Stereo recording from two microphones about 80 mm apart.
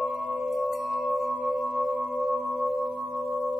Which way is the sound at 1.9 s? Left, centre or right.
Right.